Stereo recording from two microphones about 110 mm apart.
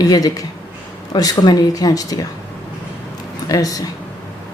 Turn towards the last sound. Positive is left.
turn(degrees=35)  # may be behind; listen again after turning